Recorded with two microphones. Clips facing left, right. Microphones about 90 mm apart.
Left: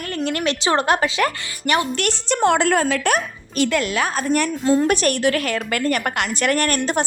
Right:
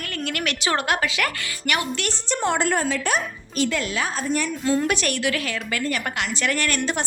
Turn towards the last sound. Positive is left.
turn(degrees=45)  # may be behind; listen again after turning